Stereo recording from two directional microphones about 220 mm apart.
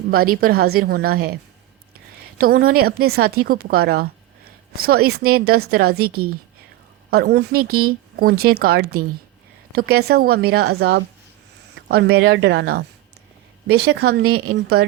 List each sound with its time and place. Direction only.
0.1 s a woman's voice: 45° right (ahead or behind)
2.4 s a woman's voice: 45° right (ahead or behind)
7.1 s a woman's voice: 45° right (ahead or behind)